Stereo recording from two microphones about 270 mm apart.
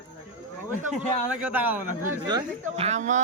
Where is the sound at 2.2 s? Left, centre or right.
Centre.